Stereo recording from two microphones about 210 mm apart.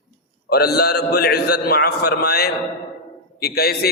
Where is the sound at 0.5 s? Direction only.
50° left (ahead or behind).